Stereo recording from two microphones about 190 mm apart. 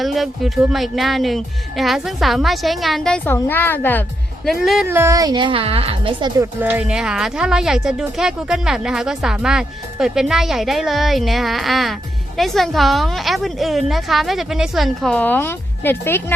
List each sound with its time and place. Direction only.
0.0 s a woman's voice: centre (ahead or behind)
4.4 s a woman's voice: centre (ahead or behind)
4.9 s a woman's voice: 15° right (ahead or behind)
6.4 s a woman's voice: 10° right (ahead or behind); by 16.2 s 10° left (ahead or behind)